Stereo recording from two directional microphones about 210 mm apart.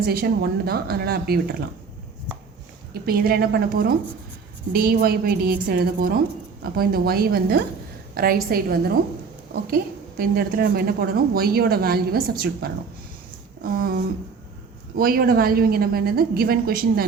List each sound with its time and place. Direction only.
0.0 s a woman's voice: 45° right (ahead or behind)
2.9 s a woman's voice: 45° right (ahead or behind)
13.6 s a sound: 45° right (ahead or behind)
14.9 s a woman's voice: 45° right (ahead or behind)